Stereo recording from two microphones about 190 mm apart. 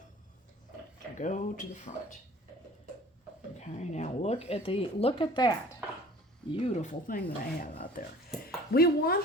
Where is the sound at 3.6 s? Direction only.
35° left (ahead or behind); by 5.7 s 20° left (ahead or behind).